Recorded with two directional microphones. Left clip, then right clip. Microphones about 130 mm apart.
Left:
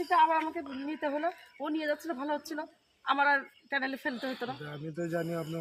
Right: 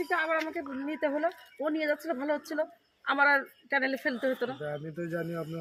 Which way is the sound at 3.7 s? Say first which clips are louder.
Right 4 dB; 15° left (ahead or behind).